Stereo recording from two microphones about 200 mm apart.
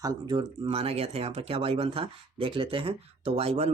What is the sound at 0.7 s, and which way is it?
Speech, 30° right (ahead or behind).